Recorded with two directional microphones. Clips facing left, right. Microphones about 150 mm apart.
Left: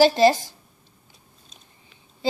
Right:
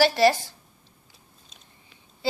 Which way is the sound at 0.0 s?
20° left (ahead or behind).